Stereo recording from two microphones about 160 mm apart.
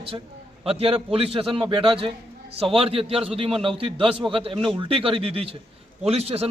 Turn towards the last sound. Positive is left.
turn(degrees=-40)  # may be behind; listen again after turning